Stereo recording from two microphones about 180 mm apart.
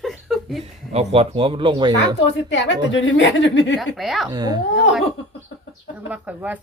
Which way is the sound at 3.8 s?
Centre (ahead or behind).